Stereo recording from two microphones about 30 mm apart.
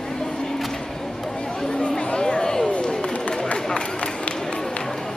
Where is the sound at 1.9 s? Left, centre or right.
Left.